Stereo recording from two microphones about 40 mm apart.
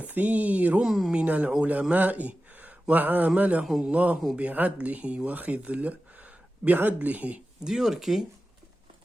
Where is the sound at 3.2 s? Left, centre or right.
Right.